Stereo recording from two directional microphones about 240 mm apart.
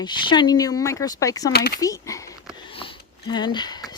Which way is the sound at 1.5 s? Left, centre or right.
Left.